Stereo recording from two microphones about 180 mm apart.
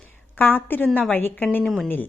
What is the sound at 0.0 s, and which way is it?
A woman's voice, 10° left (ahead or behind).